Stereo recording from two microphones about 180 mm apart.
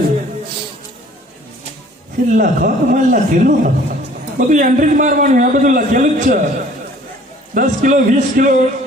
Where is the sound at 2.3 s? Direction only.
50° right (ahead or behind).